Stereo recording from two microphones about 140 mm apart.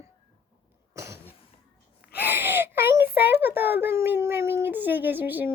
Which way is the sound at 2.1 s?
15° right (ahead or behind).